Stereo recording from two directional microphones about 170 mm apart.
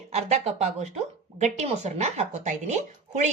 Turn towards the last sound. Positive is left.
turn(degrees=-45)  # may be behind; listen again after turning